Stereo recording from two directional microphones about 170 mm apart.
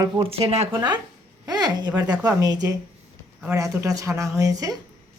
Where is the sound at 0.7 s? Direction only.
25° right (ahead or behind).